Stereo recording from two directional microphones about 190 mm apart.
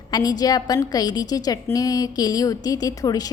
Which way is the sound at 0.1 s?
20° left (ahead or behind).